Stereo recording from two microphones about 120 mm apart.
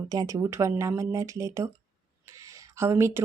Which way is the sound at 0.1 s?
30° right (ahead or behind).